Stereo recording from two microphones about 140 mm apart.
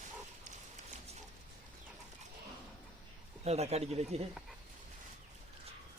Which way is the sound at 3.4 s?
50° right (ahead or behind).